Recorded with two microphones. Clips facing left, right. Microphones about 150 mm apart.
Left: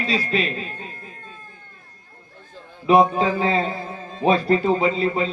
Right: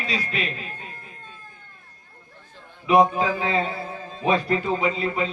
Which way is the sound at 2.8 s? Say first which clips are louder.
Left 2 dB; 35° left (ahead or behind).